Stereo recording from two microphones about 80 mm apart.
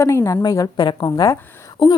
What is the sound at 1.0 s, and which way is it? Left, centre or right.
Speech, left.